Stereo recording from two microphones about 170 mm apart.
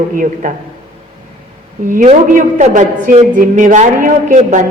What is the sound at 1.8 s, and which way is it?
A woman's voice, 45° right (ahead or behind).